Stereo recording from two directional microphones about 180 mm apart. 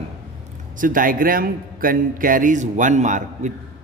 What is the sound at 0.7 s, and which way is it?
A man's voice, 50° right (ahead or behind).